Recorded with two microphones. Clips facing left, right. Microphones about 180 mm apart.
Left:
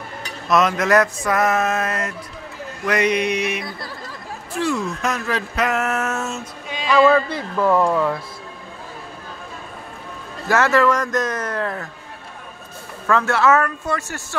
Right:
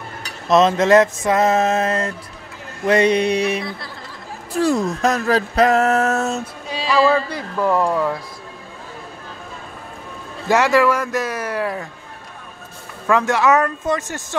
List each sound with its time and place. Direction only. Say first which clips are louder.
0.2 s music: right 4 dB; 25° right (ahead or behind)
2.8 s speech: right 4 dB; 30° right (ahead or behind)
7.7 s speech: left 1 dB; 5° right (ahead or behind)
10.5 s speech: right 1 dB; 15° right (ahead or behind)
13.0 s speech: right 1 dB; 15° right (ahead or behind)